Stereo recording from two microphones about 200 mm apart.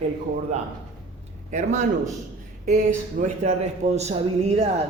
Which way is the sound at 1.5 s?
35° right (ahead or behind).